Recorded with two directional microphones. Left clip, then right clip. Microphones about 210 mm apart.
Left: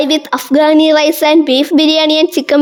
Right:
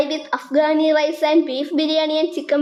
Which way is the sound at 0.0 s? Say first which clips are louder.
Left 8 dB; 55° left (ahead or behind).